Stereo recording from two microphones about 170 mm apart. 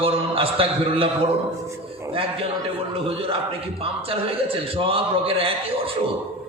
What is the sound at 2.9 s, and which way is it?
A man's voice, 35° right (ahead or behind).